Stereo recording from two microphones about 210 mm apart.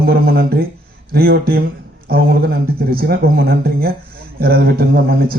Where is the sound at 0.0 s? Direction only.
45° right (ahead or behind).